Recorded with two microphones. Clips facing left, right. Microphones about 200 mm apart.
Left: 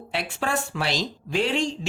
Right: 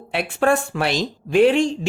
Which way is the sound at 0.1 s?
55° right (ahead or behind).